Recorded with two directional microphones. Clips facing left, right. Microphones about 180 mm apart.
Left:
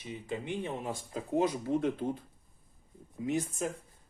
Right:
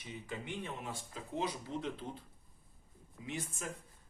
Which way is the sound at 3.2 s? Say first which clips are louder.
Left 10 dB; 40° left (ahead or behind).